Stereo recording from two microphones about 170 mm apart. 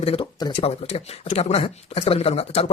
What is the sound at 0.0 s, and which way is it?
Speech, 35° left (ahead or behind).